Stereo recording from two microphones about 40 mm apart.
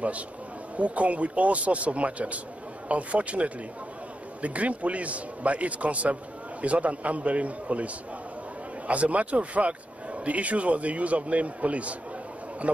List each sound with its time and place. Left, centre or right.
0.7 s a man's voice: right